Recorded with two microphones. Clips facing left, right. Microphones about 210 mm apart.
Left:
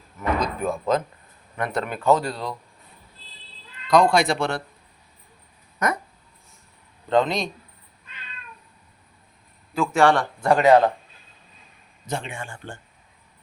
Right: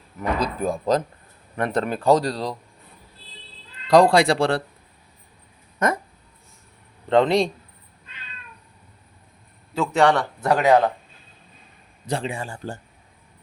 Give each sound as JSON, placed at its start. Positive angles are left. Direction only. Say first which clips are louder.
{"t": 0.2, "sound": "speech", "louder": "right 1 dB", "side_deg": -35}
{"t": 3.8, "sound": "speech", "louder": "right 3 dB", "side_deg": -35}
{"t": 7.1, "sound": "a man's voice", "louder": "right 4 dB", "side_deg": -30}
{"t": 9.7, "sound": "a man's voice", "louder": "even", "side_deg": -20}
{"t": 10.4, "sound": "speech", "louder": "left 2 dB", "side_deg": 0}
{"t": 12.0, "sound": "speech", "louder": "right 4 dB", "side_deg": -35}